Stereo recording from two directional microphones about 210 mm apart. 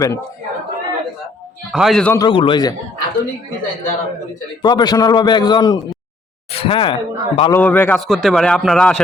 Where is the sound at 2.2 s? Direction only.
25° left (ahead or behind).